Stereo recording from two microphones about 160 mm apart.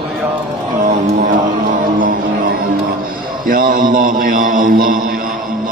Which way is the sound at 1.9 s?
60° right (ahead or behind).